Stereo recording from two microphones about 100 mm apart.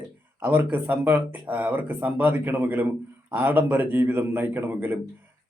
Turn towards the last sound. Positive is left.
turn(degrees=-20)  # may be behind; listen again after turning